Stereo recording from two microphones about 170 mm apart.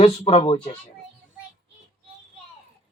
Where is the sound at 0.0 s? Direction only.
40° left (ahead or behind).